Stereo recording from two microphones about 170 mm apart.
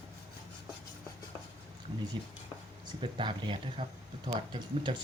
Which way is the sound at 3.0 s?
30° right (ahead or behind).